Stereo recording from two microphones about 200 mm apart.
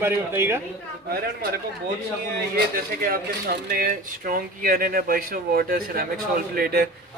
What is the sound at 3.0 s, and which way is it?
Speech, 50° right (ahead or behind).